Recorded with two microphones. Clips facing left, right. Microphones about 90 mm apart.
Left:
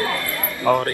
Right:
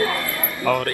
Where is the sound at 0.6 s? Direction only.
25° left (ahead or behind).